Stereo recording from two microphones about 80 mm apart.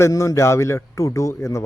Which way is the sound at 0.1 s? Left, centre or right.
Left.